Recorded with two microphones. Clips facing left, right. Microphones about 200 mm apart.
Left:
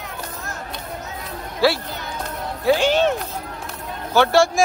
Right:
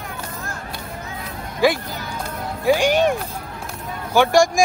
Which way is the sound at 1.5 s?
15° right (ahead or behind).